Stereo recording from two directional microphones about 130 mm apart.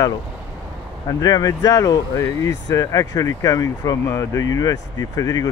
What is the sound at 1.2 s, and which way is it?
Speech, 30° left (ahead or behind).